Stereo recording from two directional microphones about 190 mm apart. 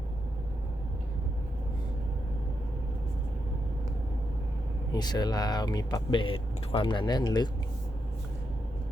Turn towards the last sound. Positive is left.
turn(degrees=20)  # may be behind; listen again after turning